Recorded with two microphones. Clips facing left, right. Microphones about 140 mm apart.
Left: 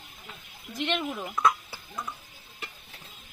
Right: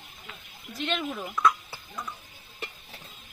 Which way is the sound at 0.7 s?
15° left (ahead or behind).